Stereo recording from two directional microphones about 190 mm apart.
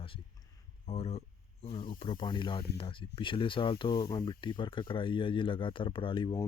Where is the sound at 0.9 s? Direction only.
30° left (ahead or behind).